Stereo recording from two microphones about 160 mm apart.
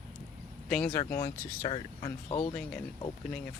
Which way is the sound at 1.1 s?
20° left (ahead or behind).